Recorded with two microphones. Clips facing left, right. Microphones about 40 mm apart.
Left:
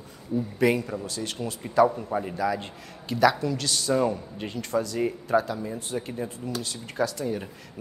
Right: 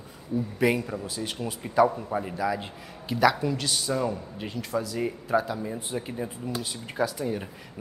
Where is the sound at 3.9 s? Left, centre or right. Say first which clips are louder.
Left 7 dB; centre.